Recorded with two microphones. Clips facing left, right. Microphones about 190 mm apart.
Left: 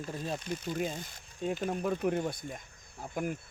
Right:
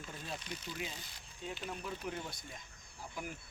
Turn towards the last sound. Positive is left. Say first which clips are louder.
# left 9 dB
turn(degrees=55)  # may be behind; listen again after turning